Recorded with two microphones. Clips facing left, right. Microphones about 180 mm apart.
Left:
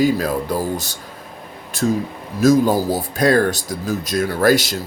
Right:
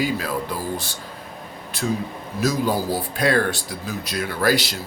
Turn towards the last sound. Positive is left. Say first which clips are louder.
# left 5 dB
turn(degrees=45)  # may be behind; listen again after turning